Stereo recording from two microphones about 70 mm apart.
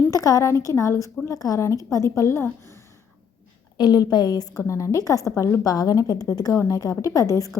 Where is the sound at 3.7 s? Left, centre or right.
Left.